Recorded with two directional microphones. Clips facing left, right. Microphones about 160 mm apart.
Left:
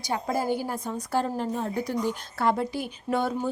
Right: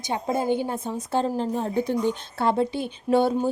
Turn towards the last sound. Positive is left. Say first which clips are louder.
# right 6 dB
turn(degrees=-30)  # may be behind; listen again after turning